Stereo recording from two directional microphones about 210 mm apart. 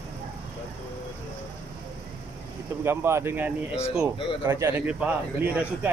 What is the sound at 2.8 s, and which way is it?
Speech, 10° right (ahead or behind).